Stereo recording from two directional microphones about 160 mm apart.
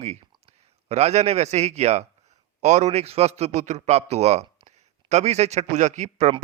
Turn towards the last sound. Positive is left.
turn(degrees=-45)  # may be behind; listen again after turning